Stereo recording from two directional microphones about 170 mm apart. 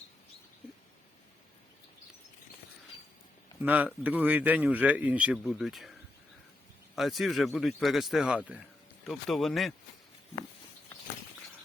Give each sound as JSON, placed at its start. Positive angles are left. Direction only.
{"t": 3.6, "sound": "speech", "side_deg": -10}
{"t": 6.9, "sound": "speech", "side_deg": 0}